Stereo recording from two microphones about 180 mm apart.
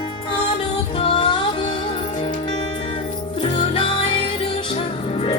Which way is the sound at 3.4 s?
30° left (ahead or behind).